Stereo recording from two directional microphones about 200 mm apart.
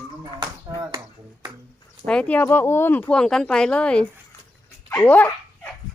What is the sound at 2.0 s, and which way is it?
Speech, 5° left (ahead or behind).